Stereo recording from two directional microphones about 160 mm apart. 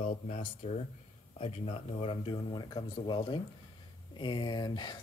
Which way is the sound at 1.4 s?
40° left (ahead or behind).